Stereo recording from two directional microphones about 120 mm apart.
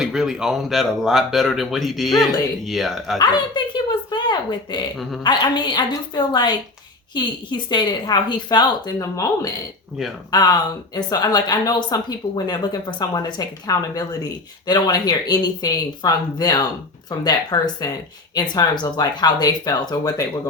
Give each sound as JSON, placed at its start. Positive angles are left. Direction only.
{"t": 0.0, "sound": "speech", "side_deg": -5}
{"t": 3.2, "sound": "a sound", "side_deg": 40}
{"t": 5.2, "sound": "speech", "side_deg": 40}